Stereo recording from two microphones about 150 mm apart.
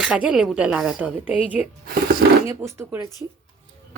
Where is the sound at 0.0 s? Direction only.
5° right (ahead or behind).